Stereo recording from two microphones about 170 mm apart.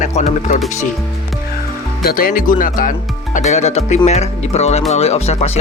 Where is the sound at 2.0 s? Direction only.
60° left (ahead or behind).